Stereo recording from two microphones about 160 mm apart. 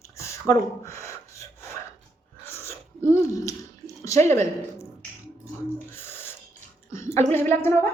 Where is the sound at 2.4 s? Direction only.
15° left (ahead or behind).